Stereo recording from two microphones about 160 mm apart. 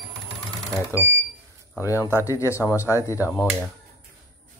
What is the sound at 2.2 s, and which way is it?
Speech, 20° left (ahead or behind).